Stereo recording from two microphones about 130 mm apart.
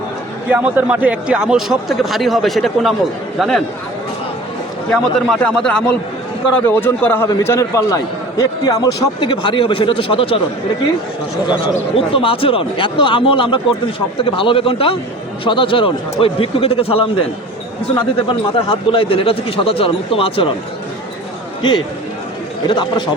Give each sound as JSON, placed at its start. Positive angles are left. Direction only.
{"t": 0.5, "sound": "speech", "side_deg": -10}
{"t": 4.9, "sound": "a man's voice", "side_deg": 5}
{"t": 11.4, "sound": "speech", "side_deg": 40}
{"t": 18.3, "sound": "speech", "side_deg": 45}
{"t": 21.6, "sound": "speech", "side_deg": 35}